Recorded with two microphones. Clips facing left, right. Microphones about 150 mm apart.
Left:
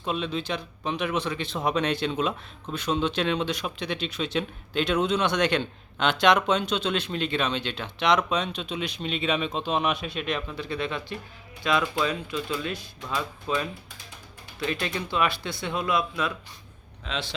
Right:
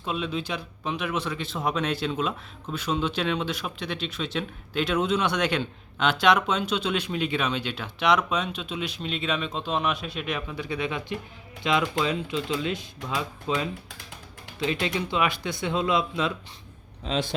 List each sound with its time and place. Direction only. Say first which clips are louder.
0.0 s speech: left 1 dB; 5° right (ahead or behind); by 16.3 s 25° right (ahead or behind)
17.0 s a man's voice: right 5 dB; 45° right (ahead or behind)